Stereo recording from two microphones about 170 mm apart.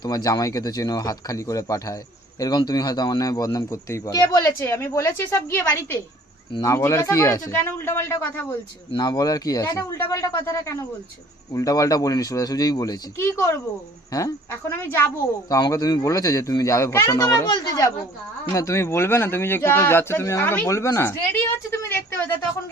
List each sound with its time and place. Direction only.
0.0 s a woman's voice: 20° left (ahead or behind)
8.9 s a woman's voice: 25° left (ahead or behind)